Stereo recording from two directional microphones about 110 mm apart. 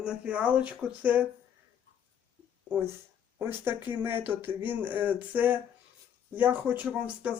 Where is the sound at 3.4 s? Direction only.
20° right (ahead or behind).